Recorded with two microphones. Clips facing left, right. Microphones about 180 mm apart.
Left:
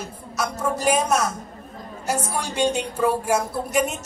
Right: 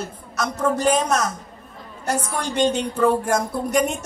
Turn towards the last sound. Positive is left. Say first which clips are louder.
# right 2 dB
turn(degrees=5)  # may be behind; listen again after turning